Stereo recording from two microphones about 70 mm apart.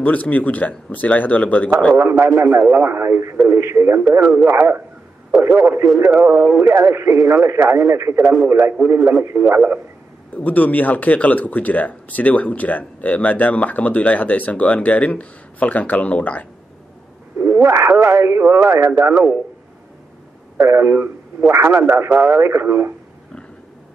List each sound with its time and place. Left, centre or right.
0.0 s speech: left
2.0 s speech: right
10.3 s speech: left
17.4 s speech: right
20.5 s speech: right